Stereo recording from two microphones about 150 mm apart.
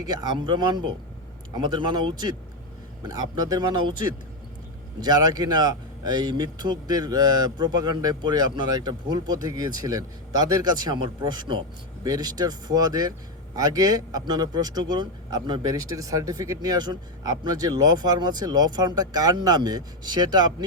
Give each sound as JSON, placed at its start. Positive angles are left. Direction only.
{"t": 0.0, "sound": "speech", "side_deg": -25}
{"t": 4.9, "sound": "speech", "side_deg": -25}